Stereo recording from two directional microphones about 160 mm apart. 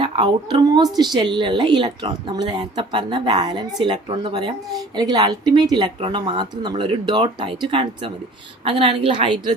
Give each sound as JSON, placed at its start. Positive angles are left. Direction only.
{"t": 0.0, "sound": "a woman's voice", "side_deg": -30}